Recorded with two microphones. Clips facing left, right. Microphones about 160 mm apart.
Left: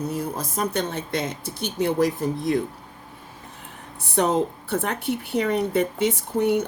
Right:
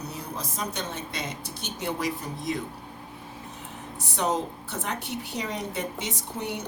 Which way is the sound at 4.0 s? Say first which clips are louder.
Left 6 dB; 60° left (ahead or behind).